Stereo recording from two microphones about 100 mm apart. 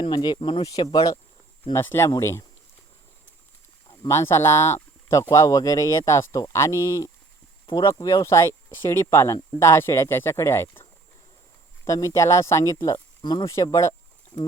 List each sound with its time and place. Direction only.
0.0 s speech: 50° left (ahead or behind)
1.7 s speech: 25° left (ahead or behind)
4.1 s speech: 25° left (ahead or behind)
11.9 s speech: 35° left (ahead or behind)